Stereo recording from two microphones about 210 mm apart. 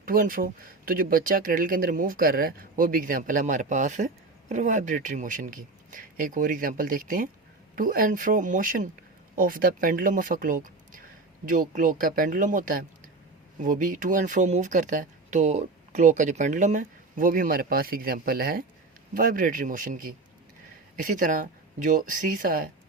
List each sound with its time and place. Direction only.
0.0 s speech: 40° right (ahead or behind)